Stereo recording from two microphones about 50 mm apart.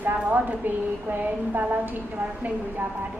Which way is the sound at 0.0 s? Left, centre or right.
Right.